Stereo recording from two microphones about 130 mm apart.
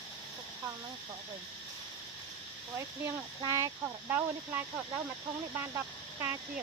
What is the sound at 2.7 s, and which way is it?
Speech, 20° right (ahead or behind).